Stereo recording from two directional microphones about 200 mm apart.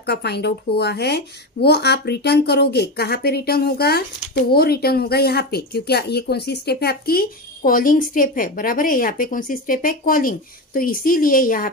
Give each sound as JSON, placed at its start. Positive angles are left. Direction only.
{"t": 0.0, "sound": "speech", "side_deg": 55}